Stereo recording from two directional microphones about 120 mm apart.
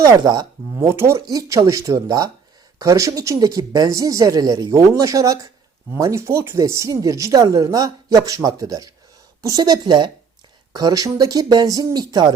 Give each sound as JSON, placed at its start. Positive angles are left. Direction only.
{"t": 0.0, "sound": "speech", "side_deg": -35}
{"t": 0.8, "sound": "speech", "side_deg": -20}